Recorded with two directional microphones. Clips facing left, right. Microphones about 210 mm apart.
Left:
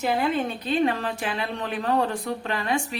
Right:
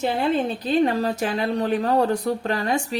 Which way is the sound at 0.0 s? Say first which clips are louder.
Right 2 dB; 35° right (ahead or behind).